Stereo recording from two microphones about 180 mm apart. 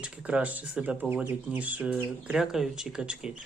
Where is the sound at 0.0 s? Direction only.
5° right (ahead or behind).